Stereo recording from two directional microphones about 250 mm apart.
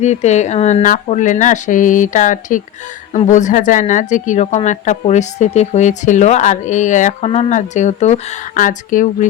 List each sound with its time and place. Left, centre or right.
0.0 s speech: left